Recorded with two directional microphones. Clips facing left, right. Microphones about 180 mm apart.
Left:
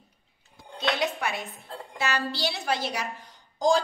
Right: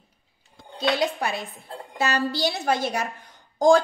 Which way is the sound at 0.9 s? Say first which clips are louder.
Right 4 dB; 35° right (ahead or behind).